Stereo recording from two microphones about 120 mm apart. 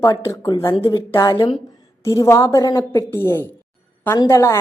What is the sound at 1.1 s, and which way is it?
A woman's voice, 30° left (ahead or behind).